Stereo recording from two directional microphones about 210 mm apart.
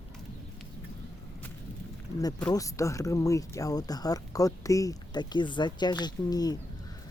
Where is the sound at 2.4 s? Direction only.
15° left (ahead or behind).